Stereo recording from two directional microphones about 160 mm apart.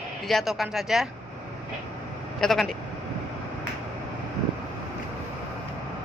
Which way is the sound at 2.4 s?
Centre (ahead or behind).